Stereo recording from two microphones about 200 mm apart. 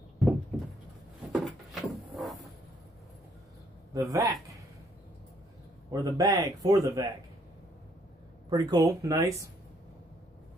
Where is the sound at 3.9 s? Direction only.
20° right (ahead or behind).